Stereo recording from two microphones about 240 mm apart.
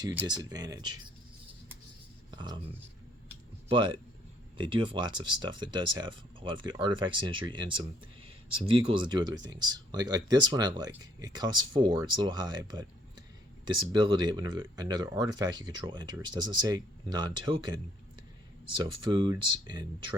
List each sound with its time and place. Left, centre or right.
0.3 s speech: centre
2.3 s speech: centre
3.7 s speech: centre